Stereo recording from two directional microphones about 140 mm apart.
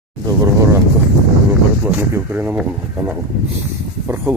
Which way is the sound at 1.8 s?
15° right (ahead or behind).